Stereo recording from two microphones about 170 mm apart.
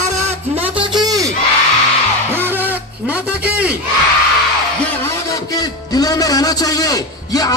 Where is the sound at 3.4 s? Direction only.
10° right (ahead or behind).